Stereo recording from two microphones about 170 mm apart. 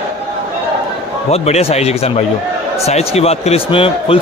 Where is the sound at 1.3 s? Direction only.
40° left (ahead or behind).